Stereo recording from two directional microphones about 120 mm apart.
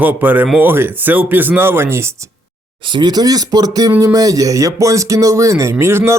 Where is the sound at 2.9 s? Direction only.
35° right (ahead or behind).